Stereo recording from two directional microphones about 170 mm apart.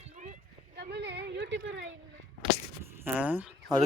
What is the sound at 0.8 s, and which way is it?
Speech, 75° right (ahead or behind).